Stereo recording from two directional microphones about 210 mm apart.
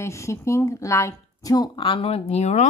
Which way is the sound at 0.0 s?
15° left (ahead or behind).